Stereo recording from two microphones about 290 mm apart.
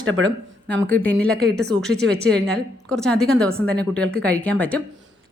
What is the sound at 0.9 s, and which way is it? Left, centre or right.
Speech, centre.